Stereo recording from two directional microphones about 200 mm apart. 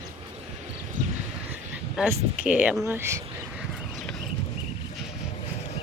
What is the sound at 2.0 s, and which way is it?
Speech, 5° right (ahead or behind).